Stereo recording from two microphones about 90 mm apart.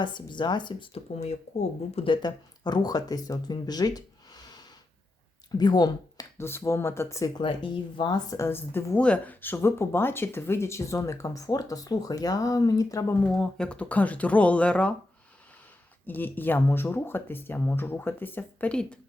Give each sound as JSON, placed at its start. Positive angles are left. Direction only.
{"t": 0.0, "sound": "speech", "side_deg": 55}
{"t": 2.2, "sound": "speech", "side_deg": 50}
{"t": 6.3, "sound": "speech", "side_deg": 30}
{"t": 7.3, "sound": "speech", "side_deg": 65}
{"t": 8.3, "sound": "speech", "side_deg": 30}
{"t": 9.0, "sound": "speech", "side_deg": 10}
{"t": 13.3, "sound": "speech", "side_deg": 10}
{"t": 16.0, "sound": "speech", "side_deg": 20}
{"t": 18.7, "sound": "speech", "side_deg": 10}